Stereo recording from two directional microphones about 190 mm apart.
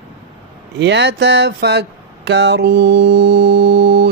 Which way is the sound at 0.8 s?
65° right (ahead or behind).